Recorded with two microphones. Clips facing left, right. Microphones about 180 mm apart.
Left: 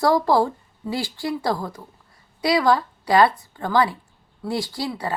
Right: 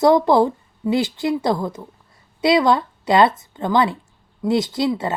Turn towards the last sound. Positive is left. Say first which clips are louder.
# right 6 dB
turn(degrees=-25)  # may be behind; listen again after turning